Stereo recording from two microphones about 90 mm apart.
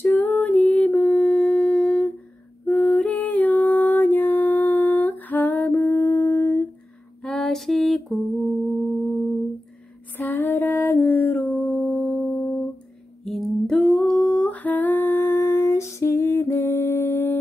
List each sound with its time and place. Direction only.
0.0 s music: 15° left (ahead or behind)
7.2 s lullaby: 5° left (ahead or behind)
10.1 s a sound: 20° left (ahead or behind)
13.2 s humming: 5° left (ahead or behind); by 17.4 s 20° left (ahead or behind)